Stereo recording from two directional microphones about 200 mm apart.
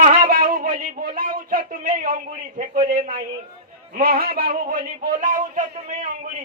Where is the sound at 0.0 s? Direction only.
40° right (ahead or behind).